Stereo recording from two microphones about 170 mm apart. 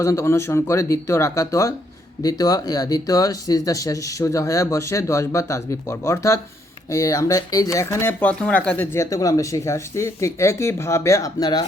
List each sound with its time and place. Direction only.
0.0 s speech: 15° left (ahead or behind)